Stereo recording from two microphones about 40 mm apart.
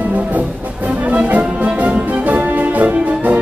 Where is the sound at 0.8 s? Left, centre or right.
Right.